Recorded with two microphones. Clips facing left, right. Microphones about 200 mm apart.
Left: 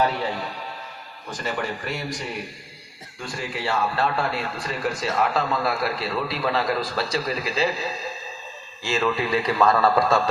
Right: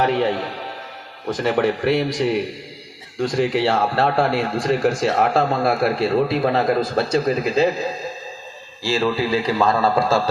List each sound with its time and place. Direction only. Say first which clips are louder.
0.0 s speech: right 5 dB; 90° right
1.3 s speech: right 10 dB; 75° right (ahead or behind); by 2.4 s 90° right
3.3 s speech: right 9 dB; 70° right (ahead or behind)
3.8 s speech: right 5 dB; 60° right (ahead or behind)
4.8 s a man's voice: right 2 dB; 75° right (ahead or behind); by 7.9 s 45° right (ahead or behind)
8.8 s a man's voice: right 4 dB; 35° right (ahead or behind)